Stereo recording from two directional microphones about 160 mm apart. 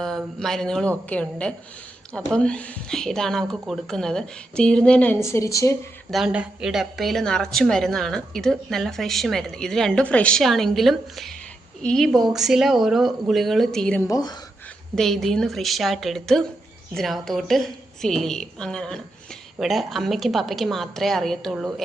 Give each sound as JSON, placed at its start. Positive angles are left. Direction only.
{"t": 0.0, "sound": "a woman's voice", "side_deg": 5}
{"t": 5.2, "sound": "speech", "side_deg": 20}
{"t": 6.1, "sound": "a woman's voice", "side_deg": -5}
{"t": 14.1, "sound": "speech", "side_deg": 25}
{"t": 14.9, "sound": "a woman's voice", "side_deg": 0}